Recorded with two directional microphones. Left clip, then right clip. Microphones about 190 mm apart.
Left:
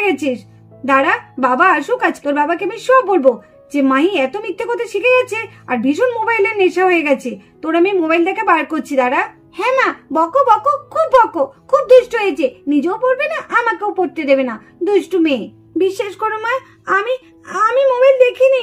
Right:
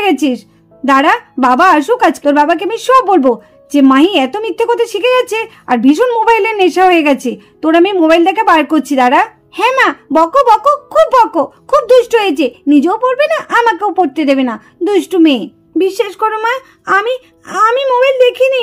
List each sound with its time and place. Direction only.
0.0 s music: 60° right (ahead or behind)
0.8 s a woman's voice: 65° right (ahead or behind)
15.8 s speech: 35° right (ahead or behind)